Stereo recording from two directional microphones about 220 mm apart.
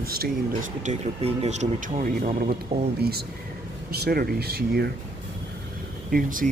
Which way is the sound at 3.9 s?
45° right (ahead or behind).